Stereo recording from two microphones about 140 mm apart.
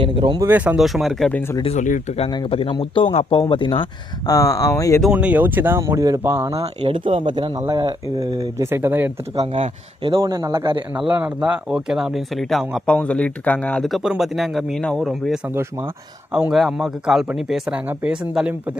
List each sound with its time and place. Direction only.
0.0 s speech: 35° right (ahead or behind)
0.4 s speech: 10° right (ahead or behind)
1.3 s speech: 15° left (ahead or behind)
1.6 s speech: 60° left (ahead or behind)
2.3 s speech: 35° left (ahead or behind)
4.3 s speech: 25° left (ahead or behind)
5.1 s speech: 10° right (ahead or behind)
6.8 s speech: 40° right (ahead or behind); by 9.1 s 15° right (ahead or behind)
9.4 s speech: 50° right (ahead or behind)
10.0 s speech: 35° right (ahead or behind)
10.3 s speech: 25° right (ahead or behind)
10.7 s speech: 35° right (ahead or behind)
11.0 s speech: 5° right (ahead or behind)